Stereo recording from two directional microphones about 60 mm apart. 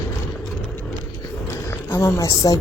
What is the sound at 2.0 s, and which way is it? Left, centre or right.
Speech, left.